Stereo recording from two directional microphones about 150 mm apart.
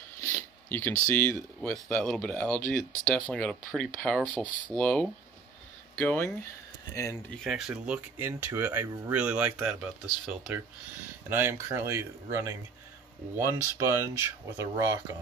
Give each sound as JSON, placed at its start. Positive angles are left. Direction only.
{"t": 0.2, "sound": "a sound", "side_deg": 15}
{"t": 1.6, "sound": "speech", "side_deg": 5}
{"t": 7.2, "sound": "speech", "side_deg": 0}
{"t": 11.2, "sound": "speech", "side_deg": -15}